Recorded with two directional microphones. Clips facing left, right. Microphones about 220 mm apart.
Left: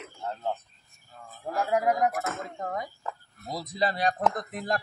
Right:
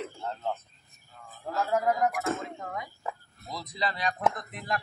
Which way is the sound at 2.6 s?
40° left (ahead or behind).